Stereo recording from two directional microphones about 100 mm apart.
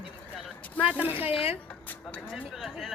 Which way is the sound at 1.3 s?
70° left (ahead or behind).